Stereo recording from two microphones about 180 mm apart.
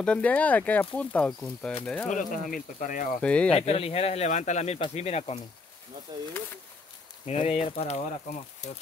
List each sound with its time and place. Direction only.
0.0 s speech: 5° left (ahead or behind)
2.0 s speech: 45° left (ahead or behind)
3.2 s speech: 5° left (ahead or behind)
3.5 s speech: 35° left (ahead or behind)
7.2 s speech: 35° left (ahead or behind)